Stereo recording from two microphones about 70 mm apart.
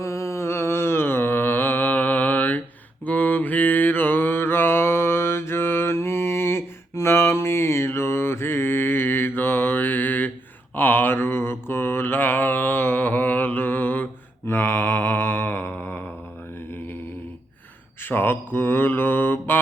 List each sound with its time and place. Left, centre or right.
0.0 s mantra: left
18.0 s mantra: left